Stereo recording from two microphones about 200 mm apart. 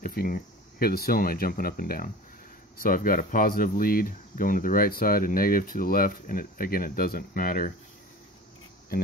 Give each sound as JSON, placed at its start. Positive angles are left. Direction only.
{"t": 0.0, "sound": "speech", "side_deg": 45}